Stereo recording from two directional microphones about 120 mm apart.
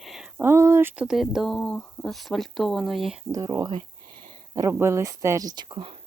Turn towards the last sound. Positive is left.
turn(degrees=-45)  # may be behind; listen again after turning